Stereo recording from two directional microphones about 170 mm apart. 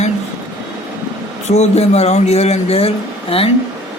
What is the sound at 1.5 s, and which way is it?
A man's voice, 40° left (ahead or behind).